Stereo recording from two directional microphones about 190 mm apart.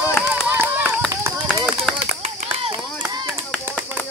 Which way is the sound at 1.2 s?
20° right (ahead or behind).